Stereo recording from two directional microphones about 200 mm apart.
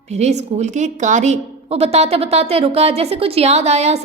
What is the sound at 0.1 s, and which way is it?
A woman's voice, 35° right (ahead or behind).